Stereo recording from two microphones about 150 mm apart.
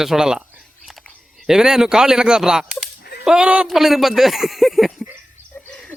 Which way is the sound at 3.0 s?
90° left.